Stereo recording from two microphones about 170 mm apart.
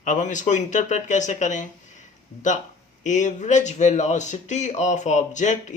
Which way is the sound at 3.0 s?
45° left (ahead or behind).